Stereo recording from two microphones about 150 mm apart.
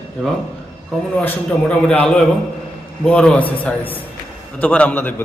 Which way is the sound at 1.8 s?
5° left (ahead or behind).